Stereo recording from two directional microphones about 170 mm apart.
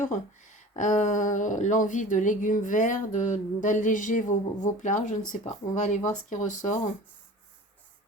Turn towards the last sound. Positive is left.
turn(degrees=45)  # may be behind; listen again after turning